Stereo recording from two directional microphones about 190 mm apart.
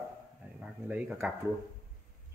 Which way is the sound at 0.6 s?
5° right (ahead or behind).